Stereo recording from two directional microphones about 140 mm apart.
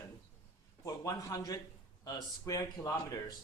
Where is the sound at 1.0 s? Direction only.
25° left (ahead or behind).